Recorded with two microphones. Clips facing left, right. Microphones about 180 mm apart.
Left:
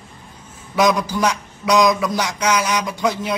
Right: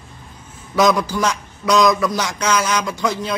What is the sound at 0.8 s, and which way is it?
A man's voice, 15° left (ahead or behind).